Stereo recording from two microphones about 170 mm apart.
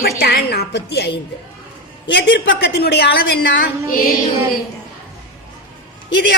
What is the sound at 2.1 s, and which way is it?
A woman's voice, 90° left.